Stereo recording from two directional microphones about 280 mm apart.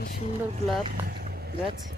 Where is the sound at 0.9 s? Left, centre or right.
Right.